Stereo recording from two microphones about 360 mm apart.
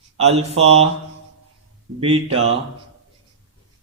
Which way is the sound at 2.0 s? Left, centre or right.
Centre.